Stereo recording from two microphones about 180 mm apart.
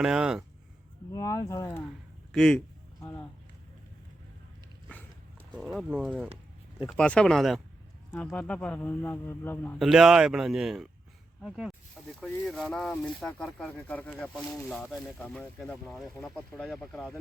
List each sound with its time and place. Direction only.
0.0 s speech: 5° right (ahead or behind)
1.1 s speech: 20° left (ahead or behind)
2.3 s speech: 5° left (ahead or behind)
3.0 s a sound: 15° left (ahead or behind)
5.5 s speech: centre (ahead or behind)
6.8 s speech: 5° left (ahead or behind)
9.7 s speech: centre (ahead or behind)